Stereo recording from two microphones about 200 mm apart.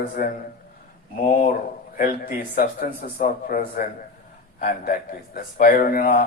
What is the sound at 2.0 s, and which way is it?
A man's voice, 45° left (ahead or behind).